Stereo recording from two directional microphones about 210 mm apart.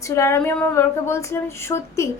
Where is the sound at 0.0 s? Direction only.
15° left (ahead or behind).